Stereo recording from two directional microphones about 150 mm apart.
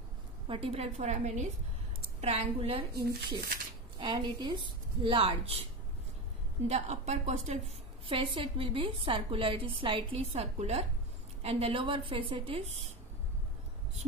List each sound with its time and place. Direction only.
0.5 s a woman's voice: 40° right (ahead or behind)
2.9 s speech: 90° right
4.0 s a woman's voice: 30° right (ahead or behind)
6.7 s a woman's voice: 50° right (ahead or behind)
8.1 s a woman's voice: 35° right (ahead or behind)